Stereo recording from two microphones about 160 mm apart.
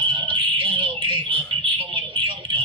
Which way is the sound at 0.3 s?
30° right (ahead or behind).